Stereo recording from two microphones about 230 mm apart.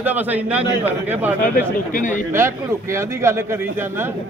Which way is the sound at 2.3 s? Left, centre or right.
Centre.